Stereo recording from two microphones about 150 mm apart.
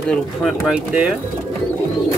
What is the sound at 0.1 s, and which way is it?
Speech, centre (ahead or behind).